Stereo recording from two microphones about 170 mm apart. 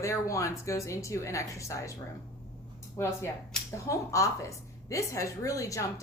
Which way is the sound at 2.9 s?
15° left (ahead or behind).